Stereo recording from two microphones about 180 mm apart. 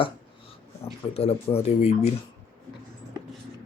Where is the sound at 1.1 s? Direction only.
35° left (ahead or behind).